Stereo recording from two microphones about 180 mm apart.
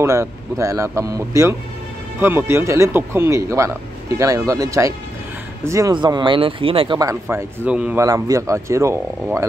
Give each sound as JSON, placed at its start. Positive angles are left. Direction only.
{"t": 0.0, "sound": "speech", "side_deg": -15}